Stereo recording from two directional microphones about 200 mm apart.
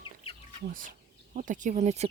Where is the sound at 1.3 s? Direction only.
40° right (ahead or behind).